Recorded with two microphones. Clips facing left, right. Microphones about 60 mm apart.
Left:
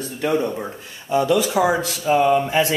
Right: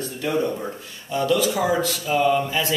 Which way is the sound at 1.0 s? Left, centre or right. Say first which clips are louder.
Left 4 dB; left.